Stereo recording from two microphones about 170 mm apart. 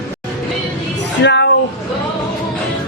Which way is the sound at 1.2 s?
90° left.